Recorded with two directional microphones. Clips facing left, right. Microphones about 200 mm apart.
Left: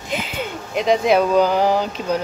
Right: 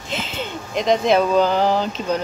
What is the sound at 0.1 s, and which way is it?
Speech, 10° left (ahead or behind).